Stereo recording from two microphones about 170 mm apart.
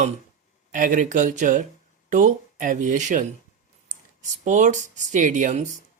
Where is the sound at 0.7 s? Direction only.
50° right (ahead or behind).